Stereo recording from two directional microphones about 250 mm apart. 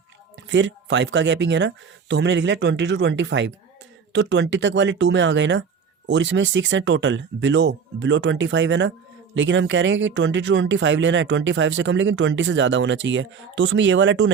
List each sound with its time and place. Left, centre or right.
0.4 s speech: right